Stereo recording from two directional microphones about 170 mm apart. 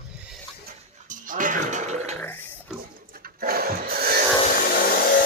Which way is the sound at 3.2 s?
60° right (ahead or behind).